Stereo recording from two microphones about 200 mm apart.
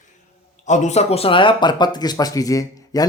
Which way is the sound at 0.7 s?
35° left (ahead or behind).